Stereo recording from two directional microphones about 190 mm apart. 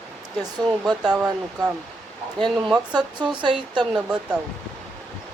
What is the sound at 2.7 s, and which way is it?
Speech, 20° right (ahead or behind).